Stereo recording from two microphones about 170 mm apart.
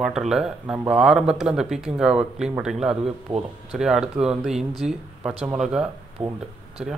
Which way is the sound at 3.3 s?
30° right (ahead or behind).